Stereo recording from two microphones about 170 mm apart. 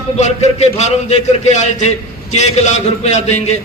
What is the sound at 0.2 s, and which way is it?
A man's voice, 40° left (ahead or behind).